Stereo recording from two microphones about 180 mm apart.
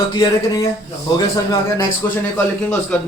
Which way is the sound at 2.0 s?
15° left (ahead or behind).